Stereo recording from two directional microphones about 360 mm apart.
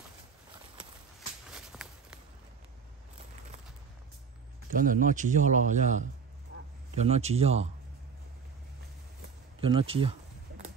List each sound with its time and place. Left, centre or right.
1.5 s walk: centre
4.6 s a man's voice: right
9.6 s a man's voice: centre